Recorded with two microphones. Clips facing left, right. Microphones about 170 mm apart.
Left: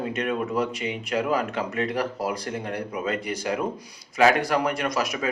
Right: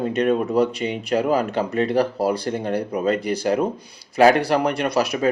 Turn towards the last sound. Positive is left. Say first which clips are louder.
# right 6 dB
turn(degrees=-35)  # may be behind; listen again after turning